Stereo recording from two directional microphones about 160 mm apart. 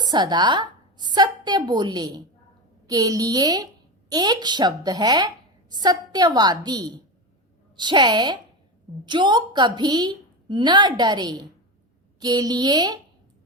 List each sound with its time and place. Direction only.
0.0 s a woman's voice: 25° right (ahead or behind)